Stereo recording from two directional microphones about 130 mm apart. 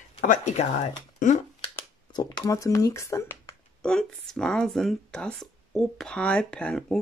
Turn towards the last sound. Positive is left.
turn(degrees=5)  # may be behind; listen again after turning